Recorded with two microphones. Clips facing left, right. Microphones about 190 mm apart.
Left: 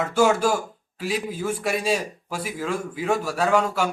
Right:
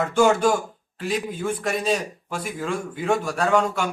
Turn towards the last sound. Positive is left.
turn(degrees=5)  # may be behind; listen again after turning